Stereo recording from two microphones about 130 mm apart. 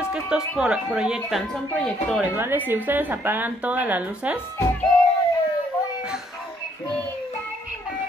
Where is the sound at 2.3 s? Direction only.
15° right (ahead or behind).